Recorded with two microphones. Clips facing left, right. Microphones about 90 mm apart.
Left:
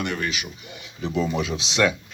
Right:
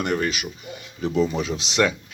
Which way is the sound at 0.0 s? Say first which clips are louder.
Right 3 dB; 40° right (ahead or behind).